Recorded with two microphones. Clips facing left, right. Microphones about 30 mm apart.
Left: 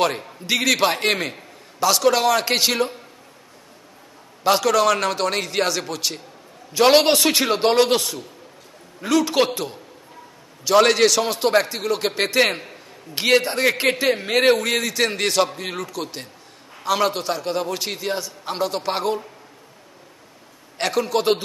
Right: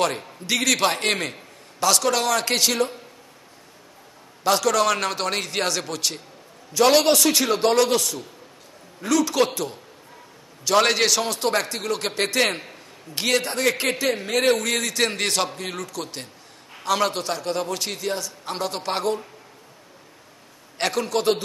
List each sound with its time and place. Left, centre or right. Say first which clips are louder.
0.0 s a man's voice: left 2 dB; centre
4.4 s a man's voice: left 2 dB; centre
4.7 s a man's voice: left 3 dB; centre
6.7 s a man's voice: left 2 dB; left
10.6 s a man's voice: left 4 dB; centre
11.2 s a man's voice: left 4 dB; centre
11.6 s a man's voice: left 3 dB; centre; by 14.5 s left
14.5 s a man's voice: left 3 dB; centre
18.6 s a man's voice: left 3 dB; centre
20.7 s a man's voice: left 2 dB; centre